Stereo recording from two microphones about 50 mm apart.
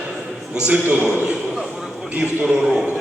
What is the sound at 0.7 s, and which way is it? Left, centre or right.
Speech, right.